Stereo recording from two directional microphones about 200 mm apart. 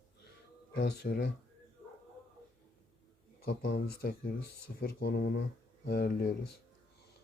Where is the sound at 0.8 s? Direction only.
55° left (ahead or behind).